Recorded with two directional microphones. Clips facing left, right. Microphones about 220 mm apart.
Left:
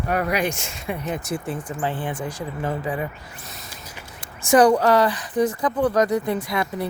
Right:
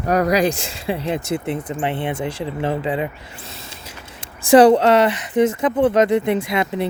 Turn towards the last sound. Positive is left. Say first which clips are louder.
# right 4 dB
turn(degrees=-25)  # may be behind; listen again after turning